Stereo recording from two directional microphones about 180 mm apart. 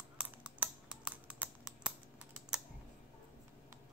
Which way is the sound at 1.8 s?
5° right (ahead or behind).